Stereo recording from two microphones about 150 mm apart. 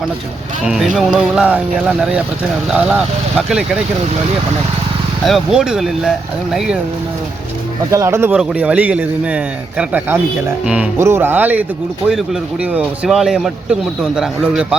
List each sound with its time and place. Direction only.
0.6 s speech: 5° right (ahead or behind)
5.2 s speech: centre (ahead or behind)
7.9 s speech: 20° right (ahead or behind)